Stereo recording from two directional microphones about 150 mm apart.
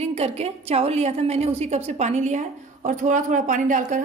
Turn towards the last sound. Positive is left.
turn(degrees=-60)  # may be behind; listen again after turning